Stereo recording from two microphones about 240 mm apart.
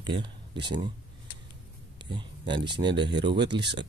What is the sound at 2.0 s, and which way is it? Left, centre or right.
Speech, centre.